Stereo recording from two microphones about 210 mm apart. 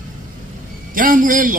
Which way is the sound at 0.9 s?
40° right (ahead or behind).